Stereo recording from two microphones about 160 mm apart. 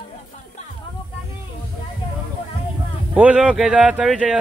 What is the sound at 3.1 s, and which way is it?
Speech, 10° right (ahead or behind).